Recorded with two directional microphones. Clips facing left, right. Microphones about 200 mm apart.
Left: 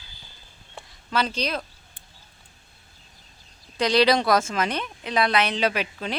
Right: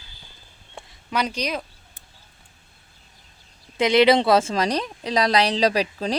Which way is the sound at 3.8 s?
20° right (ahead or behind).